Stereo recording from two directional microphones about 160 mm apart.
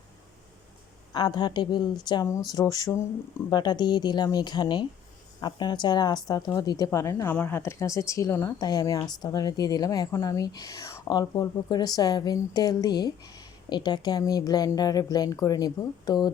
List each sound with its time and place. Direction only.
1.1 s speech: 30° left (ahead or behind)